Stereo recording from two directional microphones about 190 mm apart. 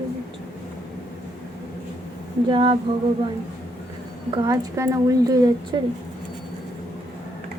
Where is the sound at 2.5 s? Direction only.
25° right (ahead or behind).